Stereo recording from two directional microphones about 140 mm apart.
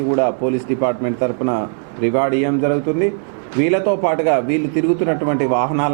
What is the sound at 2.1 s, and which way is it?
A man's voice, 15° right (ahead or behind).